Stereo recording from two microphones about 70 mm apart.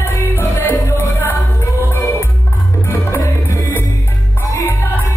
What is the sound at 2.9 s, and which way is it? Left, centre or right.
Music, left.